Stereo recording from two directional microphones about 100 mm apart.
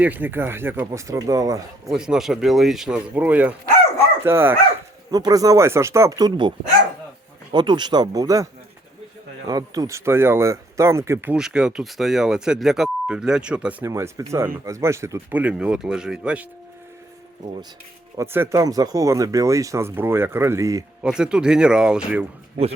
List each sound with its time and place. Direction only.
0.0 s speech: 20° right (ahead or behind); by 1.6 s 35° right (ahead or behind)
1.9 s speech: 5° right (ahead or behind)
3.2 s speech: 15° right (ahead or behind)
5.1 s speech: 35° right (ahead or behind)
6.1 s speech: 50° right (ahead or behind)
7.5 s speech: 50° right (ahead or behind)
9.5 s speech: 40° right (ahead or behind)
11.3 s speech: 5° right (ahead or behind)
13.8 s speech: 30° right (ahead or behind)
15.3 s speech: 15° right (ahead or behind)
18.2 s speech: 25° right (ahead or behind)
18.5 s speech: 40° right (ahead or behind)
21.0 s speech: 5° right (ahead or behind)